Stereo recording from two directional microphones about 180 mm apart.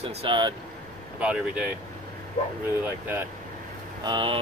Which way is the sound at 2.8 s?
10° right (ahead or behind).